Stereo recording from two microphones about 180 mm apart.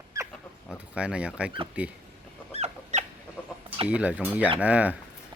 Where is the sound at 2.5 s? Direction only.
40° right (ahead or behind).